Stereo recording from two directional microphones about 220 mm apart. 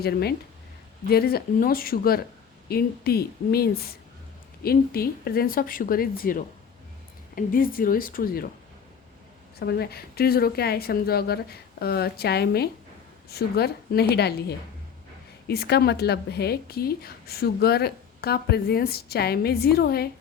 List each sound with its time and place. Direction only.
0.0 s a woman's voice: 45° left (ahead or behind)
9.6 s a woman's voice: 45° left (ahead or behind)